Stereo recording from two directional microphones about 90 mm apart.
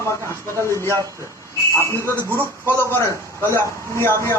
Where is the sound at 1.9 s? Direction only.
30° left (ahead or behind).